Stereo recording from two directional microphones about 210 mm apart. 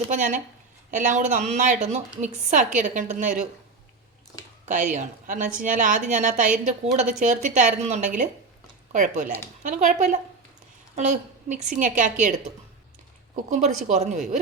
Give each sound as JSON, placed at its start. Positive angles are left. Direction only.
{"t": 0.1, "sound": "a woman's voice", "side_deg": -35}
{"t": 4.6, "sound": "a woman's voice", "side_deg": -35}
{"t": 13.3, "sound": "a woman's voice", "side_deg": -35}